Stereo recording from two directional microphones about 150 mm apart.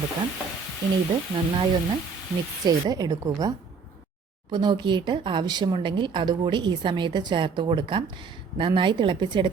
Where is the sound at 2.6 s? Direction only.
25° right (ahead or behind).